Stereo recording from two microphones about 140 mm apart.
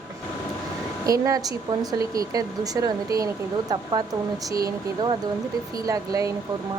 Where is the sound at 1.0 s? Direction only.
25° right (ahead or behind).